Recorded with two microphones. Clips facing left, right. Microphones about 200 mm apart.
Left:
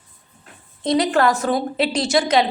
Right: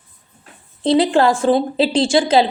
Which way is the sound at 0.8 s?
30° right (ahead or behind).